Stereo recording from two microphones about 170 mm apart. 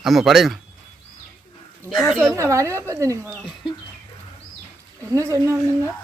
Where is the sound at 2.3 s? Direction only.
15° right (ahead or behind).